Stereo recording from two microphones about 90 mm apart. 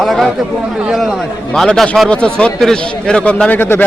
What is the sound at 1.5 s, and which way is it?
A man's voice, 5° left (ahead or behind).